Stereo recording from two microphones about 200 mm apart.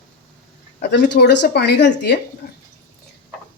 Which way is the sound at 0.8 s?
55° left (ahead or behind).